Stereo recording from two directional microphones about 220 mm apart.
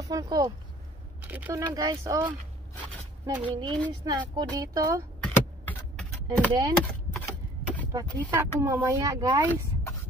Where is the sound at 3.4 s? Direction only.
20° right (ahead or behind).